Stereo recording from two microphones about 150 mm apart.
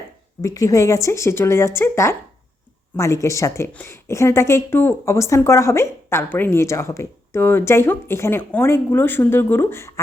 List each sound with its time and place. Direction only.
0.4 s speech: 20° left (ahead or behind)